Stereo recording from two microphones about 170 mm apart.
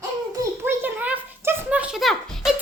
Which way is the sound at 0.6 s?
10° right (ahead or behind).